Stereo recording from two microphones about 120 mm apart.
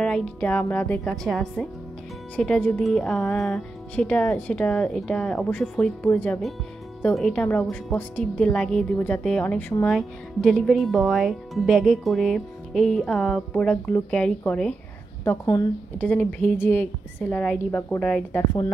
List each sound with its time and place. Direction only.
0.0 s speech: 5° left (ahead or behind)
9.8 s speech: centre (ahead or behind)